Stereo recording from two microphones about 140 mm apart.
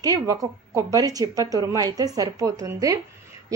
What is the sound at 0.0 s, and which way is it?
A woman's voice, 25° right (ahead or behind).